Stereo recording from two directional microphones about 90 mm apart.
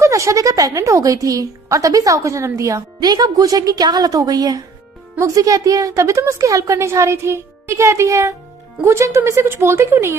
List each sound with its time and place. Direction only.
0.0 s speech: 35° right (ahead or behind)